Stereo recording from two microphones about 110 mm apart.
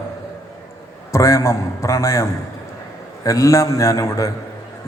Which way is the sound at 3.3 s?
30° left (ahead or behind).